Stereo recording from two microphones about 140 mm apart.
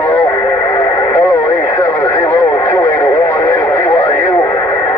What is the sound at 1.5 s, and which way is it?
Radio, 30° left (ahead or behind).